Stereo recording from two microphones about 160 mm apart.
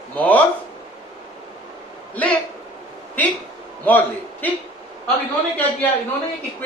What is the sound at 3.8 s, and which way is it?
Speech, 10° left (ahead or behind).